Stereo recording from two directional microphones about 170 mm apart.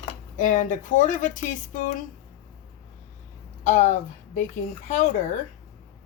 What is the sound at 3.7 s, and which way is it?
Speech, 45° left (ahead or behind).